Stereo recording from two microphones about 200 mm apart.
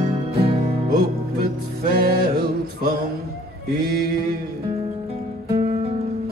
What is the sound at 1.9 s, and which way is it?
Music, 50° right (ahead or behind).